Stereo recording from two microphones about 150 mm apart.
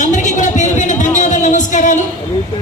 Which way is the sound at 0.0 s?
55° left (ahead or behind).